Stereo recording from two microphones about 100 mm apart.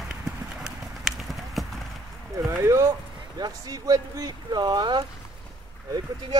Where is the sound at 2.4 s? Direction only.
30° right (ahead or behind).